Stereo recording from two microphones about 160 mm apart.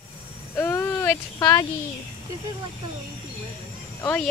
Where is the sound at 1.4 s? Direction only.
20° left (ahead or behind).